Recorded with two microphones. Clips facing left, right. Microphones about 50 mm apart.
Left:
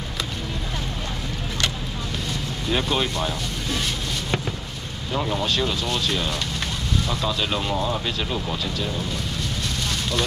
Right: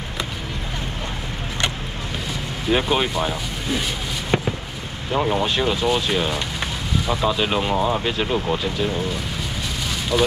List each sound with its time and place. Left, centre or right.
2.7 s speech: centre
5.1 s speech: right
10.1 s speech: centre